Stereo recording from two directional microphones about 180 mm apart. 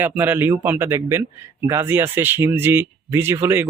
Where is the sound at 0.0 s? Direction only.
10° right (ahead or behind).